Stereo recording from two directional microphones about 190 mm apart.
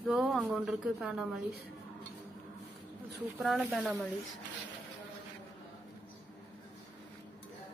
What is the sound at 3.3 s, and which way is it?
Speech, centre (ahead or behind).